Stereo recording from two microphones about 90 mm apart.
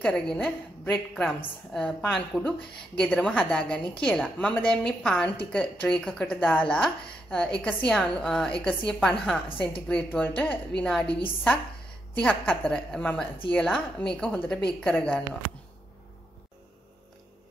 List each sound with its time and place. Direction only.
0.0 s a woman's voice: 5° left (ahead or behind)
9.5 s a woman's voice: 80° left
9.8 s a woman's voice: 10° left (ahead or behind)
12.2 s a woman's voice: 10° left (ahead or behind)